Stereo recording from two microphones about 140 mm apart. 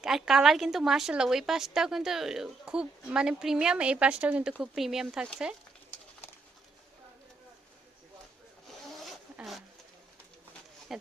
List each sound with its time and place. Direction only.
0.0 s speech: 5° right (ahead or behind)
8.6 s zipper: centre (ahead or behind)